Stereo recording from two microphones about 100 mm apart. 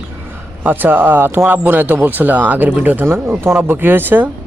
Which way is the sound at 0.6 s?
20° right (ahead or behind).